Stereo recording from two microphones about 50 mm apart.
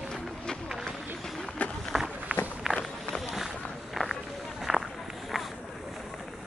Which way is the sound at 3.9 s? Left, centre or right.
Centre.